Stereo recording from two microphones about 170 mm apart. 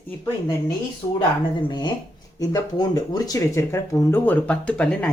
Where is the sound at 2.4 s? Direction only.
20° left (ahead or behind).